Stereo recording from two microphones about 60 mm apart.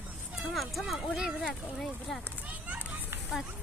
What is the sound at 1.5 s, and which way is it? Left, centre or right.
Child singing, centre.